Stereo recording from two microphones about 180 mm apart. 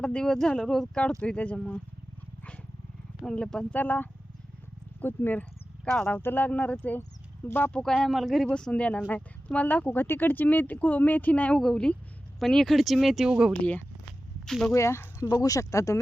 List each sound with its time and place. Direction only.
0.0 s speech: 5° left (ahead or behind)
3.2 s speech: 5° left (ahead or behind)
13.5 s speech: 5° left (ahead or behind)
14.7 s speech: 15° left (ahead or behind)